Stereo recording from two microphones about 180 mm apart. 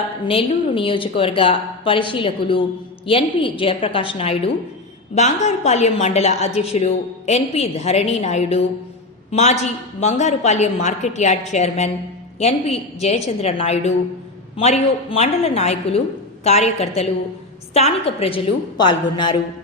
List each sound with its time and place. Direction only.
0.3 s a woman's voice: 30° left (ahead or behind)